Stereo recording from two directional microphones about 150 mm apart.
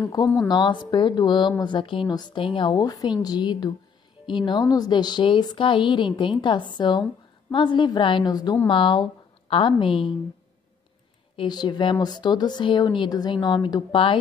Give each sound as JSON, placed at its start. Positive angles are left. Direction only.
{"t": 0.1, "sound": "a woman's voice", "side_deg": 25}
{"t": 11.3, "sound": "a woman's voice", "side_deg": 30}